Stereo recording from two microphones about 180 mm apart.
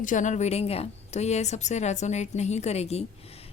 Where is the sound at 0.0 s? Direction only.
45° left (ahead or behind).